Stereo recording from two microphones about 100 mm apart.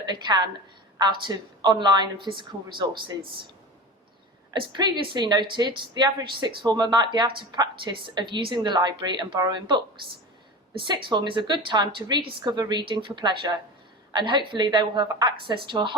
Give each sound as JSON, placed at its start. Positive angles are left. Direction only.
{"t": 0.0, "sound": "a woman's voice", "side_deg": -50}
{"t": 4.7, "sound": "speech", "side_deg": -50}